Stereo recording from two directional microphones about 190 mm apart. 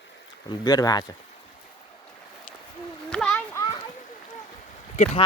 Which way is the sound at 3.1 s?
5° left (ahead or behind).